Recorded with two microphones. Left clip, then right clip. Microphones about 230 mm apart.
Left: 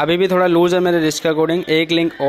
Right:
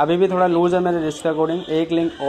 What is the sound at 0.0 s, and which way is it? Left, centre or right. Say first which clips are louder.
A man's voice: left 2 dB; left.